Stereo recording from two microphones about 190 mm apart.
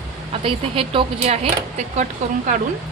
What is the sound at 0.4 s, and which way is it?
Speech, 30° right (ahead or behind).